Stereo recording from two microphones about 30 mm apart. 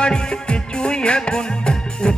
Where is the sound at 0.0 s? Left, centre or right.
Left.